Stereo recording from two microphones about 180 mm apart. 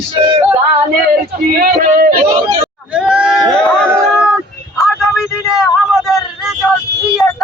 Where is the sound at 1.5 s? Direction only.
55° right (ahead or behind).